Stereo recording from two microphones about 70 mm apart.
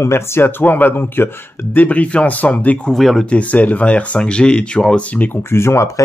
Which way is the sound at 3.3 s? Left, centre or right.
Left.